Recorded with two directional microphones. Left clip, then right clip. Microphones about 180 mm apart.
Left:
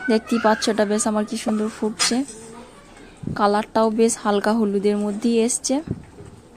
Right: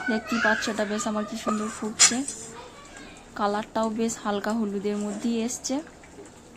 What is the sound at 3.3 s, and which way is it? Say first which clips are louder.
Speech: left 8 dB; 35° left (ahead or behind).